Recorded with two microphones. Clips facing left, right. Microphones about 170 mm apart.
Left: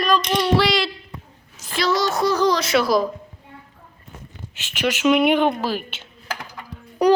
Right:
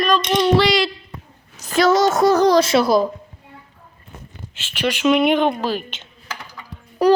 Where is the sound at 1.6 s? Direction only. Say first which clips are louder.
Right 6 dB; 45° right (ahead or behind).